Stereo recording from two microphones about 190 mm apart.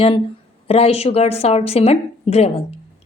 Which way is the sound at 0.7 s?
30° left (ahead or behind).